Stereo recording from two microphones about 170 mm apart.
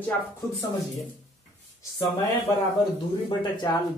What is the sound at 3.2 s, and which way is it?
Speech, 25° left (ahead or behind).